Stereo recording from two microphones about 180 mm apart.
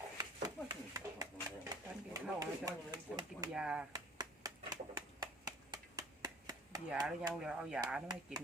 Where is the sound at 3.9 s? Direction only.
20° right (ahead or behind).